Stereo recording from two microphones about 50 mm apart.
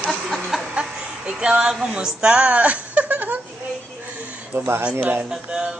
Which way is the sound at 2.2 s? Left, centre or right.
Centre.